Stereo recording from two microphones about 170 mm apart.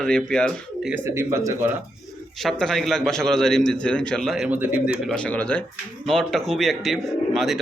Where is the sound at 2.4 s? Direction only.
Centre (ahead or behind).